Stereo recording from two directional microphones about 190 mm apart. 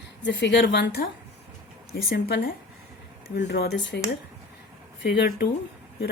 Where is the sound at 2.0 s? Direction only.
60° left (ahead or behind).